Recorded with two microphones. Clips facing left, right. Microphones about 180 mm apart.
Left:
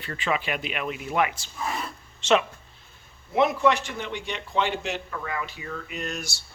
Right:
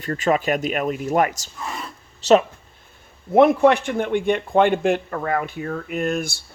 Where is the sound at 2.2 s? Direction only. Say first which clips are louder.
Right 7 dB; 35° right (ahead or behind).